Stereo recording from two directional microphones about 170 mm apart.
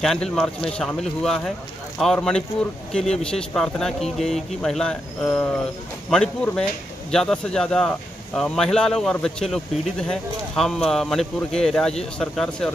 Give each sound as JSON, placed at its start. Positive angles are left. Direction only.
{"t": 0.0, "sound": "speech", "side_deg": 5}